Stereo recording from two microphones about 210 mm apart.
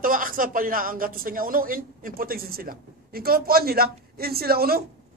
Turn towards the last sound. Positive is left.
turn(degrees=-45)  # may be behind; listen again after turning